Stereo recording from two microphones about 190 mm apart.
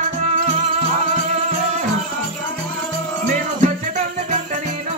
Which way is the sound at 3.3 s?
40° right (ahead or behind).